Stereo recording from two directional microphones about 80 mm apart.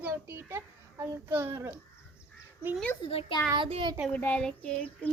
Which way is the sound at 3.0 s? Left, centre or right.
Left.